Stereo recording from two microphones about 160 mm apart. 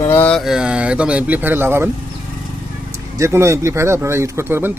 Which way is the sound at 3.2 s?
15° right (ahead or behind).